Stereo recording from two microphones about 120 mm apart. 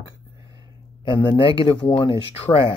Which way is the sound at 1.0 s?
40° left (ahead or behind).